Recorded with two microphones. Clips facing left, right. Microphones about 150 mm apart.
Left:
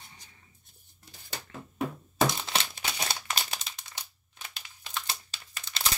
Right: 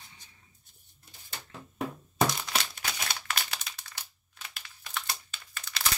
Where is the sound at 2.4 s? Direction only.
25° left (ahead or behind).